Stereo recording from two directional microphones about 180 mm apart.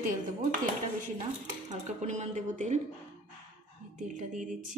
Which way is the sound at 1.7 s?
40° right (ahead or behind).